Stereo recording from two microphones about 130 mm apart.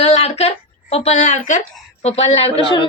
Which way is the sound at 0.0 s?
55° left (ahead or behind).